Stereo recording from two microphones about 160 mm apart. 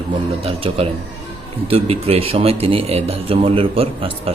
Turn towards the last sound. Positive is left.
turn(degrees=-35)  # may be behind; listen again after turning